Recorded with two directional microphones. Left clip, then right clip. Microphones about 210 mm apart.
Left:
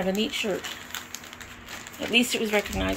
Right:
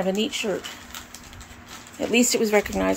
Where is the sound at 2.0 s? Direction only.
20° right (ahead or behind).